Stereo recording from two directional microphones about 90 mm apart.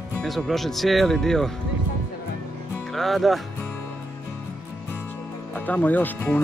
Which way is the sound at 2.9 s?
Centre (ahead or behind).